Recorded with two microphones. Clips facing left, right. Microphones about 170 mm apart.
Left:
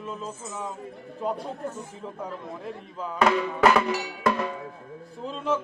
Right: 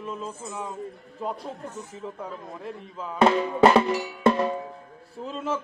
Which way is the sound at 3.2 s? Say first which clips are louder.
Right 3 dB; 30° right (ahead or behind).